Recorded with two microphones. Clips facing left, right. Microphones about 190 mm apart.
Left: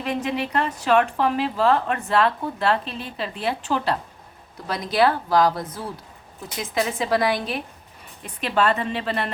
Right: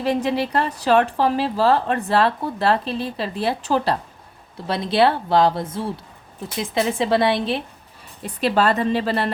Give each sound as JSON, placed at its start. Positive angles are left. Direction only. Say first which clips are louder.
{"t": 0.0, "sound": "a woman's voice", "louder": "right 5 dB", "side_deg": -35}